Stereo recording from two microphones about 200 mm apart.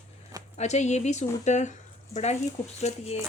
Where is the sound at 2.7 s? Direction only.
30° left (ahead or behind).